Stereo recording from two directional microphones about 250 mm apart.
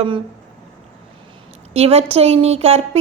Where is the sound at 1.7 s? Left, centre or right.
Right.